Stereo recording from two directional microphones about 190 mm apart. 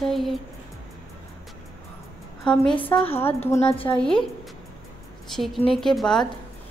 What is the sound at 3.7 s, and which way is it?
Speech, 30° left (ahead or behind).